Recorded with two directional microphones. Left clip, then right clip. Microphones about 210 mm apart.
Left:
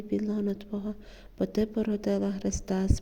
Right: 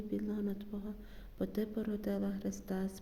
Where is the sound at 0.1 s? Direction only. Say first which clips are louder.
Left 10 dB; 35° left (ahead or behind).